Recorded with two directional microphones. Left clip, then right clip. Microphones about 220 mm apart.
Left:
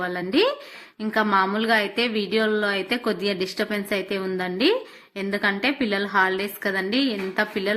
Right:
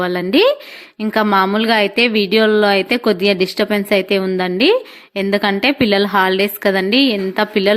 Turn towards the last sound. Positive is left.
turn(degrees=-35)  # may be behind; listen again after turning